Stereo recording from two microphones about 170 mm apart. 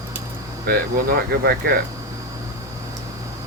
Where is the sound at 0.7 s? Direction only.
65° right (ahead or behind).